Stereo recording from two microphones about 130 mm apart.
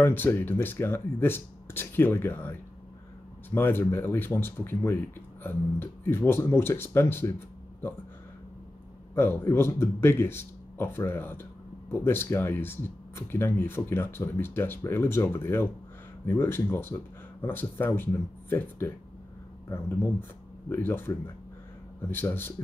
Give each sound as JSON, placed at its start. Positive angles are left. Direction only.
{"t": 0.0, "sound": "speech", "side_deg": 15}
{"t": 9.1, "sound": "speech", "side_deg": 20}